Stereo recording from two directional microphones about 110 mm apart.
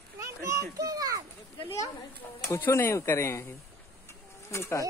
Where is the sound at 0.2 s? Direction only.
30° right (ahead or behind).